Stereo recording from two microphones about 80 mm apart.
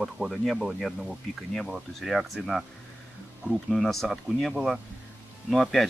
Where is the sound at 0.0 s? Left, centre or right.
Centre.